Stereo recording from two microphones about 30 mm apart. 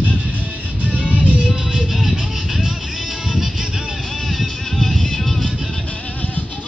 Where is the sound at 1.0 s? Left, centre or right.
Right.